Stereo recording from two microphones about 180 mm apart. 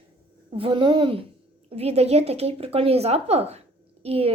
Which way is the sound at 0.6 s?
25° right (ahead or behind).